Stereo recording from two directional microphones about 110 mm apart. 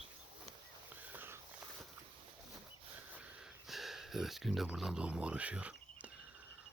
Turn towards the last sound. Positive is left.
turn(degrees=-10)  # may be behind; listen again after turning